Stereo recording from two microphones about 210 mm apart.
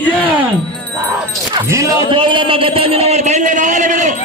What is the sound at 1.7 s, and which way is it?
Speech, 15° right (ahead or behind).